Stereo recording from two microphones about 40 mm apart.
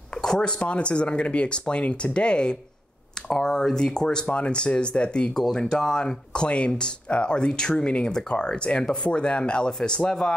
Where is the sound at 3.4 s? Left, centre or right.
Centre.